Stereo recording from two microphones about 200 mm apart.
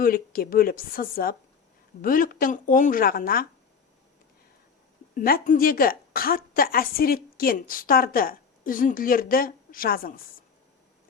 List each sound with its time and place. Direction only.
0.0 s a woman's voice: 45° left (ahead or behind)
5.1 s a woman's voice: 45° left (ahead or behind)